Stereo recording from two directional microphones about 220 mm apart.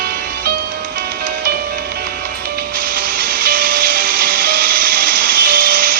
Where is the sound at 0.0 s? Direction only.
40° right (ahead or behind).